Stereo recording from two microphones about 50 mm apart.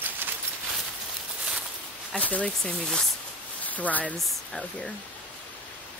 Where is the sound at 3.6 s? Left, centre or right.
Left.